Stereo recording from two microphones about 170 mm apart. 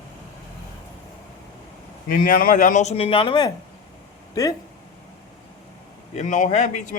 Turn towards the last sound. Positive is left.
turn(degrees=45)  # may be behind; listen again after turning